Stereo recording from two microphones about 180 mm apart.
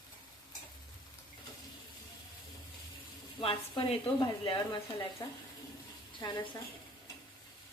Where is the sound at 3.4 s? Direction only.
30° left (ahead or behind).